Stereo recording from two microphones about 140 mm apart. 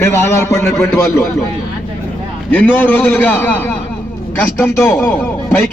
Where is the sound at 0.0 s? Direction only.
15° left (ahead or behind).